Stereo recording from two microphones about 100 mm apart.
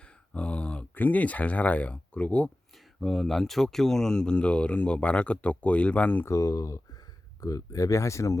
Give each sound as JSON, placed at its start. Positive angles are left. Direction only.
{"t": 0.0, "sound": "a sound", "side_deg": 10}
{"t": 3.0, "sound": "speech", "side_deg": 0}
{"t": 6.2, "sound": "speech", "side_deg": 35}